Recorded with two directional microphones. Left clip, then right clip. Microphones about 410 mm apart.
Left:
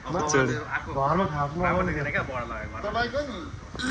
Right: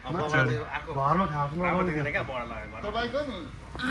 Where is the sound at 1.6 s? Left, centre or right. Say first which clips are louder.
Left 2 dB; centre.